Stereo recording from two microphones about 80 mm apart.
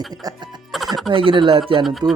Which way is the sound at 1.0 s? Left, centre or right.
Right.